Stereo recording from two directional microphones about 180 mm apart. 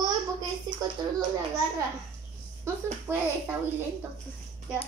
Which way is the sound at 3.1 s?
10° right (ahead or behind).